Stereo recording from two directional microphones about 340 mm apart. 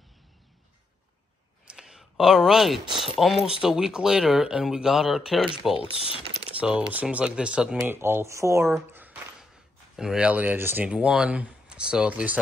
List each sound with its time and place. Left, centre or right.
1.7 s a sound: centre
3.0 s speech: centre
5.9 s speech: centre
6.9 s speech: centre